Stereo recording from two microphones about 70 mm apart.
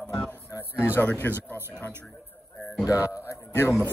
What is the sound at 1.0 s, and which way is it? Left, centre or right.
Speech, left.